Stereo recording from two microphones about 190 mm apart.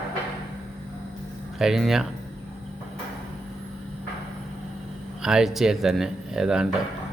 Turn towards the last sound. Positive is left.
turn(degrees=-5)  # may be behind; listen again after turning